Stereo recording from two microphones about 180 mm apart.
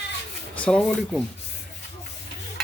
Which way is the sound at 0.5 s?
5° left (ahead or behind).